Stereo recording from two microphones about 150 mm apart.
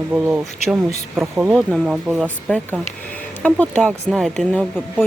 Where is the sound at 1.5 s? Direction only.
Centre (ahead or behind).